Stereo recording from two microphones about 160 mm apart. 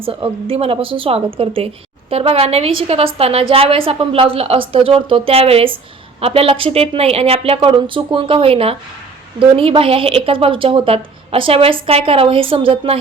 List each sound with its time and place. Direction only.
0.0 s a woman's voice: 35° right (ahead or behind)